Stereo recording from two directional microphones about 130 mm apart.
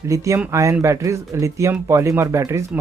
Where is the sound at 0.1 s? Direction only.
25° right (ahead or behind).